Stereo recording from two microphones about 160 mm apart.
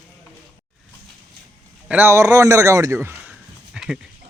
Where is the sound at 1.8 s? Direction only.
10° right (ahead or behind).